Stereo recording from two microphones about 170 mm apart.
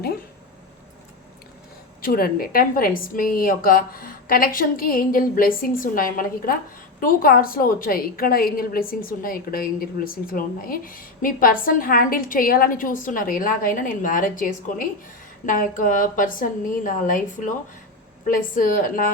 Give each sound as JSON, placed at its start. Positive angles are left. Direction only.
{"t": 2.0, "sound": "a woman's voice", "side_deg": 60}